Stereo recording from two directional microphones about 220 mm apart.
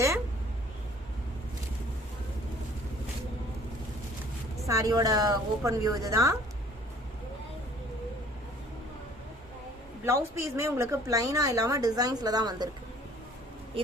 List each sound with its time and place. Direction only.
4.6 s a woman's voice: 15° right (ahead or behind)
10.0 s a woman's voice: 10° right (ahead or behind)
13.7 s speech: 25° right (ahead or behind)